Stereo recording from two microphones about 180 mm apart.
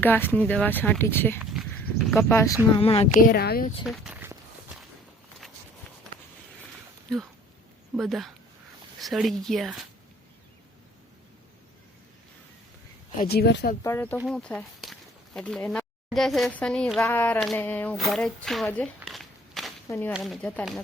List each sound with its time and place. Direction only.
0.0 s speech: 10° left (ahead or behind)
1.4 s livestock: centre (ahead or behind)
2.7 s speech: 35° left (ahead or behind)
3.2 s speech: 60° left (ahead or behind)
3.8 s speech: 5° right (ahead or behind)
7.9 s speech: centre (ahead or behind)
13.1 s speech: 60° left (ahead or behind)
13.8 s speech: 10° left (ahead or behind)
18.4 s a sound: centre (ahead or behind)
19.9 s speech: 10° left (ahead or behind)
20.1 s speech: centre (ahead or behind)